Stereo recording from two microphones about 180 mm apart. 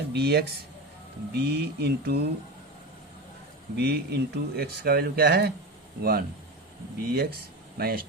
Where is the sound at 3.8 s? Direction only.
65° right (ahead or behind).